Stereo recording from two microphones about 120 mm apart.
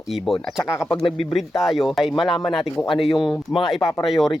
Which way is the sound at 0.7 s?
35° left (ahead or behind).